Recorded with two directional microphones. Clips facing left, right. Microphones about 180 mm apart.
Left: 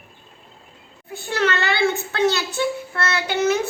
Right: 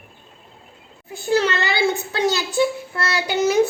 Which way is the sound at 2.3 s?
15° right (ahead or behind).